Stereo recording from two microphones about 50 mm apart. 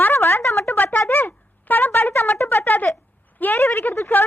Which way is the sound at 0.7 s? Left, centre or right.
Left.